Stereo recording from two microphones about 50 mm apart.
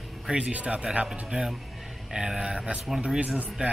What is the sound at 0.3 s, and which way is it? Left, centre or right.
Speech, right.